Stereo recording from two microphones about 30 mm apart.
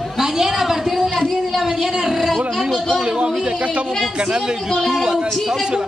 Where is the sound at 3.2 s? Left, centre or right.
Right.